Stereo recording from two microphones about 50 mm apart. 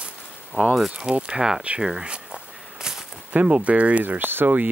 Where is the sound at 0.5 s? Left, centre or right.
Left.